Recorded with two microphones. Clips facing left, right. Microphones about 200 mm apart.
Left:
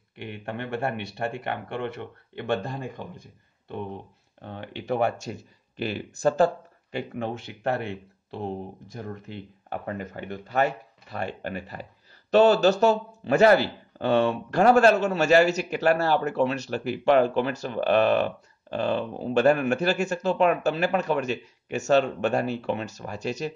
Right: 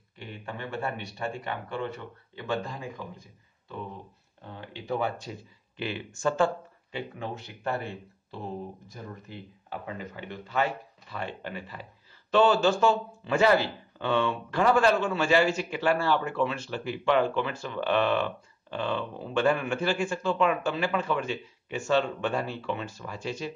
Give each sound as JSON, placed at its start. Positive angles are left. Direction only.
{"t": 0.2, "sound": "speech", "side_deg": 65}
{"t": 5.4, "sound": "speech", "side_deg": 40}
{"t": 7.4, "sound": "a man's voice", "side_deg": 75}